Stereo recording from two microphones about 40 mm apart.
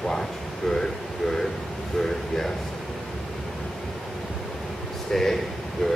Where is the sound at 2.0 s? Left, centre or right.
Centre.